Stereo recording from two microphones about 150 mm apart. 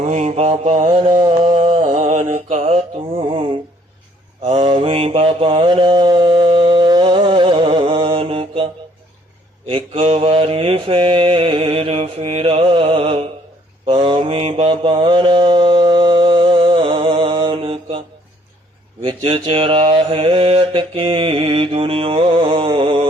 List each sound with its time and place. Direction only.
0.0 s mantra: 50° right (ahead or behind)
4.6 s mantra: 35° right (ahead or behind)
19.0 s mantra: 40° right (ahead or behind)